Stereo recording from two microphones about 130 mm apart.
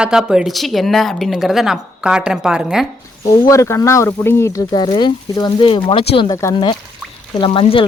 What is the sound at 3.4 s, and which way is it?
Speech, 20° left (ahead or behind).